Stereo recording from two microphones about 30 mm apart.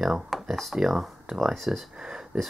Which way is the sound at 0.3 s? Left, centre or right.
Centre.